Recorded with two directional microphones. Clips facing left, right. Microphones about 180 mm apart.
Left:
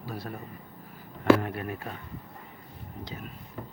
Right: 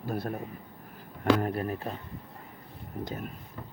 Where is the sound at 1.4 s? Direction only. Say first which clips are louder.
Right 3 dB; 35° right (ahead or behind).